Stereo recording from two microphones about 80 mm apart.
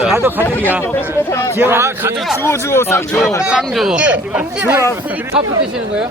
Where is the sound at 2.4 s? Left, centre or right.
Left.